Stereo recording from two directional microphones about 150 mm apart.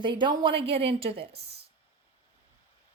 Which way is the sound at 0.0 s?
30° right (ahead or behind).